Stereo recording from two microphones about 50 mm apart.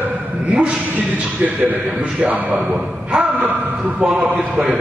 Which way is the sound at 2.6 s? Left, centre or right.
Right.